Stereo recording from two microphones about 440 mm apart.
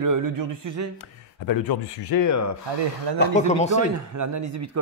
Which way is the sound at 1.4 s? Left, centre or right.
Left.